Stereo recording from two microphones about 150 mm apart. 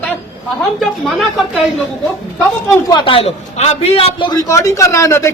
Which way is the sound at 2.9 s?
35° left (ahead or behind).